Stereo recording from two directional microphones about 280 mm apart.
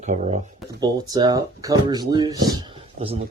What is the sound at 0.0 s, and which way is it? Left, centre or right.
Speech, right.